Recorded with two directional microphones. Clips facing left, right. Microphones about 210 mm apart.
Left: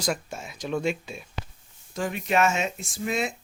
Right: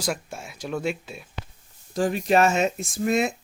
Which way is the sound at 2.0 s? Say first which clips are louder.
Right 4 dB; 35° right (ahead or behind).